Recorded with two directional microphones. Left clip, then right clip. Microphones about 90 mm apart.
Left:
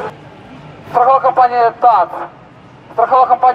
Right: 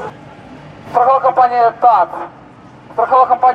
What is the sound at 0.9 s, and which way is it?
Speech, 5° right (ahead or behind).